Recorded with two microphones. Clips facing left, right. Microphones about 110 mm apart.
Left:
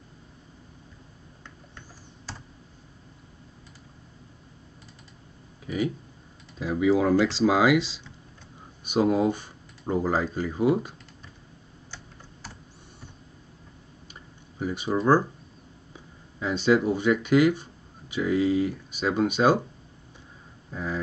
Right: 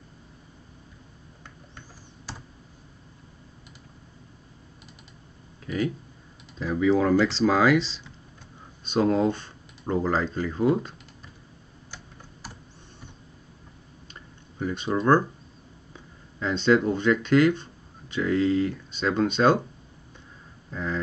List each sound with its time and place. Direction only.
6.6 s speech: 10° left (ahead or behind)
14.6 s speech: 10° left (ahead or behind)
16.3 s speech: 10° left (ahead or behind)
20.7 s speech: 10° left (ahead or behind)